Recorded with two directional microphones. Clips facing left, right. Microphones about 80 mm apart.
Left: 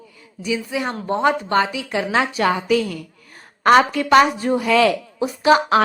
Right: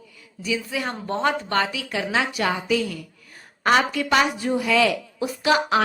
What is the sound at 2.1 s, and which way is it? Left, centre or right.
A woman's voice, left.